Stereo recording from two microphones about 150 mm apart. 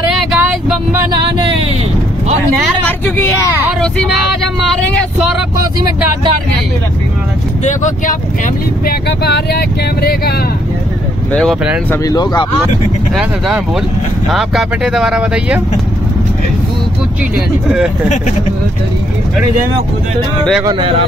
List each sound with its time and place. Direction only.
0.4 s a sound: 10° right (ahead or behind)
2.7 s vehicle: 15° left (ahead or behind)
8.8 s speech: 90° left
11.9 s speech: 25° left (ahead or behind)
13.1 s speech: 5° right (ahead or behind)